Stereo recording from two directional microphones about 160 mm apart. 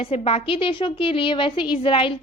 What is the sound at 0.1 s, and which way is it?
A woman's voice, 40° left (ahead or behind).